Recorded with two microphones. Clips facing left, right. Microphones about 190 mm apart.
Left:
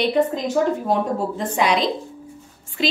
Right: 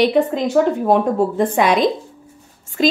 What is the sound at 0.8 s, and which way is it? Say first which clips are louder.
A woman's voice: right 6 dB; 55° right (ahead or behind).